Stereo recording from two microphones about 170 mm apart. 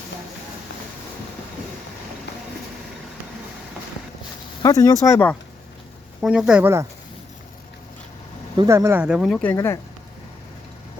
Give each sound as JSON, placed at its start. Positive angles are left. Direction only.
{"t": 4.6, "sound": "speech", "side_deg": 20}
{"t": 6.2, "sound": "speech", "side_deg": -5}
{"t": 8.5, "sound": "speech", "side_deg": -15}
{"t": 9.3, "sound": "speech", "side_deg": 10}